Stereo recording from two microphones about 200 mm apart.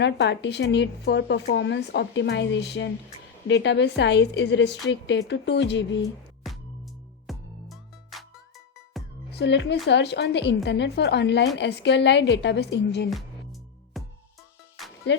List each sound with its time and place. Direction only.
0.0 s a woman's voice: 60° left (ahead or behind)
6.4 s music: centre (ahead or behind)
9.3 s a woman's voice: 60° left (ahead or behind)
14.0 s music: centre (ahead or behind)